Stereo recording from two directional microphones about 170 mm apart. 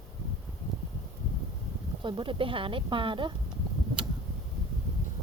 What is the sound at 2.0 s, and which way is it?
Speech, 30° right (ahead or behind).